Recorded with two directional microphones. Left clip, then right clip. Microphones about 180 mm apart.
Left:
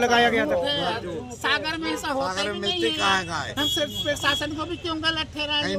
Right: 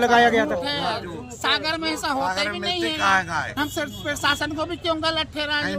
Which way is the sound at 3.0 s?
35° right (ahead or behind).